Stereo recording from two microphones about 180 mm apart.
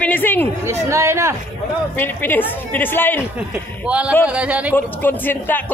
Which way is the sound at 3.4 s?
5° right (ahead or behind).